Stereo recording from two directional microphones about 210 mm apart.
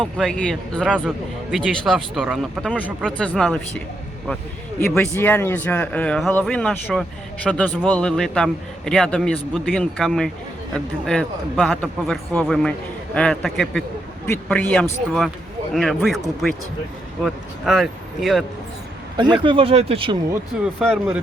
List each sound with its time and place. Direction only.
0.0 s a man's voice: 5° left (ahead or behind)
3.2 s a man's voice: 5° left (ahead or behind)
19.1 s speech: 20° right (ahead or behind)
20.7 s a man's voice: centre (ahead or behind)